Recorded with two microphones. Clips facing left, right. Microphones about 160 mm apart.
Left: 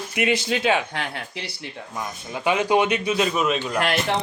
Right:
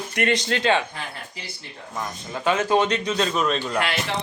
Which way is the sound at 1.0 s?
75° left (ahead or behind).